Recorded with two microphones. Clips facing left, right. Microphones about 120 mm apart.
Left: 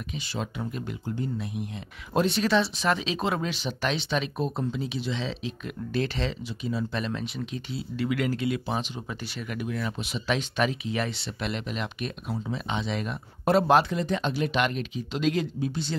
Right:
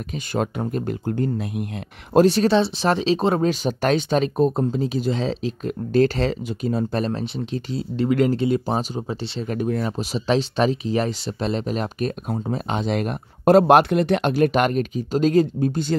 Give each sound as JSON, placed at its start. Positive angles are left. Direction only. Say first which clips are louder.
{"t": 0.1, "sound": "speech", "louder": "right 10 dB", "side_deg": -50}
{"t": 2.1, "sound": "speech", "louder": "right 8 dB", "side_deg": -40}
{"t": 14.3, "sound": "speech", "louder": "right 8 dB", "side_deg": -45}